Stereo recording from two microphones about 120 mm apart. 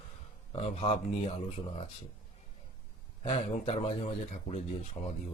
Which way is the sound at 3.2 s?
60° left (ahead or behind).